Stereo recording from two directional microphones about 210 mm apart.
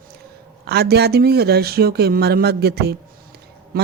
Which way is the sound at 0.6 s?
50° right (ahead or behind).